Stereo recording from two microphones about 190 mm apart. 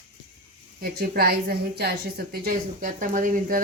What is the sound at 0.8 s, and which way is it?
A woman's voice, 55° right (ahead or behind).